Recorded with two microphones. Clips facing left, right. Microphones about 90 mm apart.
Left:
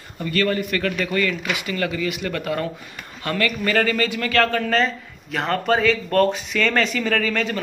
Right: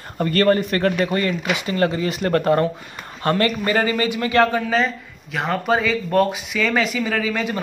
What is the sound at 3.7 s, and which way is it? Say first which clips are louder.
A man's voice: right 1 dB; 20° right (ahead or behind).